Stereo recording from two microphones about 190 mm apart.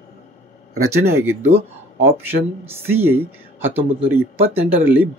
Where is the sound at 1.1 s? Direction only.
15° right (ahead or behind).